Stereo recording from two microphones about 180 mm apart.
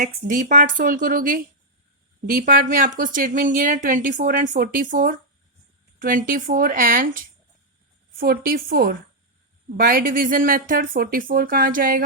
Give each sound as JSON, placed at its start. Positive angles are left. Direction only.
{"t": 0.0, "sound": "speech", "side_deg": -45}
{"t": 8.2, "sound": "speech", "side_deg": -55}